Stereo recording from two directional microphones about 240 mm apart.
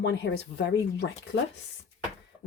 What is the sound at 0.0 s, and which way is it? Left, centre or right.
Speech, left.